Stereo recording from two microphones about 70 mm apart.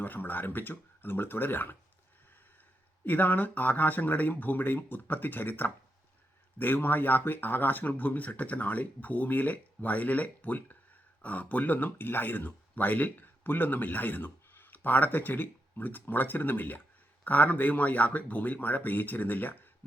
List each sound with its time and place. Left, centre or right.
0.0 s speech: left
3.0 s speech: left